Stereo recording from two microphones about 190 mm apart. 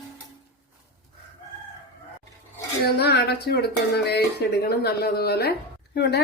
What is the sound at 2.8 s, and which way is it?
Speech, 55° left (ahead or behind).